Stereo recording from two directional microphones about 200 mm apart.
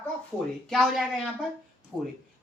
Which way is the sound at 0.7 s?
Centre (ahead or behind).